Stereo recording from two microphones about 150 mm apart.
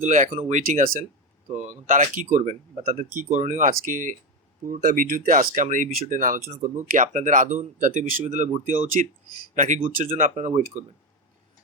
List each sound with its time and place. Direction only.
0.0 s speech: 50° right (ahead or behind)
3.7 s speech: 60° right (ahead or behind)